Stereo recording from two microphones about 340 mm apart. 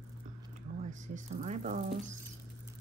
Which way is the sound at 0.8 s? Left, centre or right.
Right.